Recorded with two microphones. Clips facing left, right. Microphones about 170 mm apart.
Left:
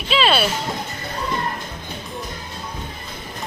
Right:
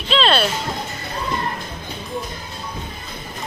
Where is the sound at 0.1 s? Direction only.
5° left (ahead or behind).